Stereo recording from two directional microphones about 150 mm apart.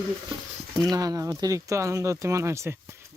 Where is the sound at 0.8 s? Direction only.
25° right (ahead or behind).